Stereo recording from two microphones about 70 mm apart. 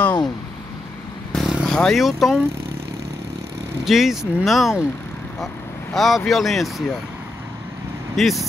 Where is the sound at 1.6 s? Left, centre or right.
Centre.